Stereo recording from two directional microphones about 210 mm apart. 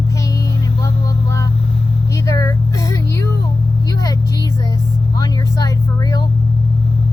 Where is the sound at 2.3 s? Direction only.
15° left (ahead or behind).